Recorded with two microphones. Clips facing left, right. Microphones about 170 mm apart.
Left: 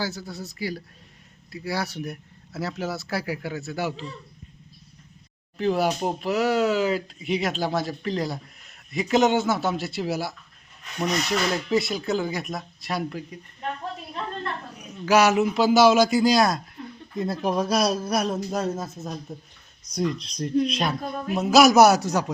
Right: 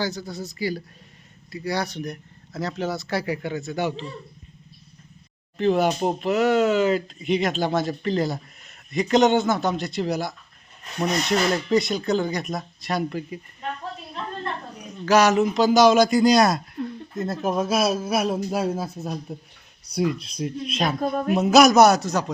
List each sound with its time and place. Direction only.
0.0 s speech: 5° left (ahead or behind)
5.5 s speech: centre (ahead or behind)
14.4 s a sound: 10° right (ahead or behind)
15.0 s speech: 10° left (ahead or behind)
21.0 s speech: 50° right (ahead or behind)
21.3 s a man's voice: centre (ahead or behind)